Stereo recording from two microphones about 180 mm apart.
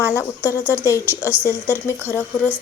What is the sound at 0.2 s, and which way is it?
Speech, 15° left (ahead or behind).